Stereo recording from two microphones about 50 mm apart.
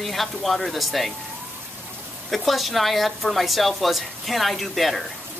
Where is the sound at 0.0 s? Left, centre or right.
Centre.